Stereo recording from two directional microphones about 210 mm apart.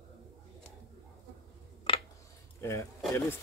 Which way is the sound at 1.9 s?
25° left (ahead or behind).